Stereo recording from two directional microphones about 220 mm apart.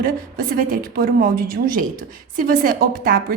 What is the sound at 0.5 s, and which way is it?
A woman's voice, 40° right (ahead or behind).